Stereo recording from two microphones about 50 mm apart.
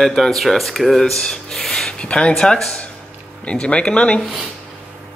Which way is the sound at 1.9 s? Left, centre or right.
Left.